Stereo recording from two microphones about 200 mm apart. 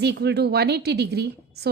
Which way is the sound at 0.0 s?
55° right (ahead or behind).